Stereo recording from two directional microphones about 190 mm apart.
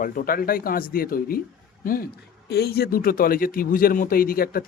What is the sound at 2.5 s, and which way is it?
Speech, 55° left (ahead or behind).